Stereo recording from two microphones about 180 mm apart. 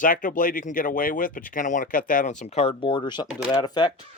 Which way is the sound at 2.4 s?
35° left (ahead or behind).